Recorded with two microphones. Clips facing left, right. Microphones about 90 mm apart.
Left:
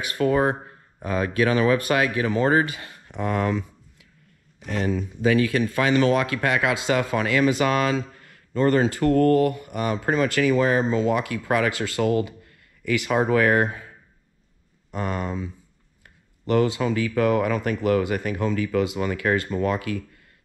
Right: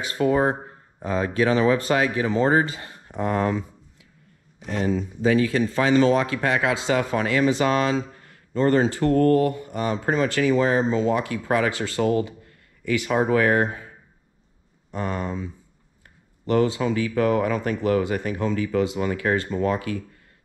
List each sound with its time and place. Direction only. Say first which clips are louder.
0.1 s speech: even; 25° right (ahead or behind)
1.1 s speech: even; 60° left (ahead or behind)
1.4 s speech: right 1 dB; 25° right (ahead or behind)
1.8 s speech: even; 60° left (ahead or behind)
2.2 s speech: right 1 dB; 20° right (ahead or behind)
2.7 s a sound: right 1 dB; 25° right (ahead or behind)
5.2 s speech: even; 65° left (ahead or behind)
5.6 s speech: right 2 dB; 25° right (ahead or behind)
15.0 s speech: even; 30° right (ahead or behind)
16.0 s a sound: even; 30° right (ahead or behind)
16.8 s speech: even; 25° right (ahead or behind)